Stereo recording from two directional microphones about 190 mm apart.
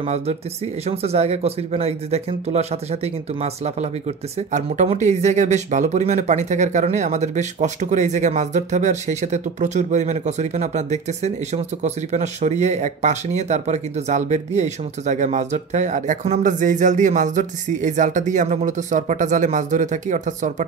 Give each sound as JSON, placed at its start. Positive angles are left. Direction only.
{"t": 0.0, "sound": "speech", "side_deg": -35}